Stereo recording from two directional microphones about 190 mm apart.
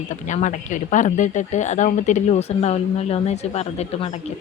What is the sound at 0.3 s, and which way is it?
Speech, 40° left (ahead or behind).